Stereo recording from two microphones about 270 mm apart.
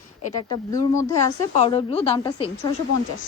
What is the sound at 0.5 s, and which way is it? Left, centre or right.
Speech, centre.